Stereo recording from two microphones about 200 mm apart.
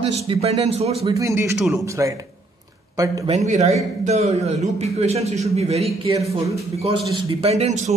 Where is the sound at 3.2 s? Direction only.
35° right (ahead or behind).